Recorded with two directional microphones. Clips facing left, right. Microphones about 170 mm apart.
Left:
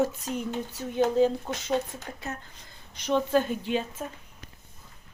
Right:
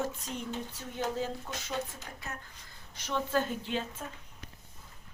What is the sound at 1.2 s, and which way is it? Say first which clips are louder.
Speech: left 13 dB; 20° left (ahead or behind).